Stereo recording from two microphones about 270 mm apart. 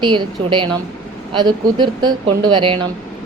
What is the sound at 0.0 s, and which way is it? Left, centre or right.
A woman's voice, centre.